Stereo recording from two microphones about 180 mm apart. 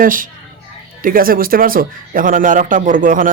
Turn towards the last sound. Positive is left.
turn(degrees=-45)  # may be behind; listen again after turning